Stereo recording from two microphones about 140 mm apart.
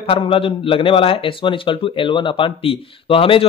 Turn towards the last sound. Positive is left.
turn(degrees=40)  # may be behind; listen again after turning